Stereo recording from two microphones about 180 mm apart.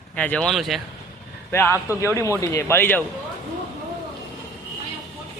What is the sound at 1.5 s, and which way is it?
Speech, 15° left (ahead or behind).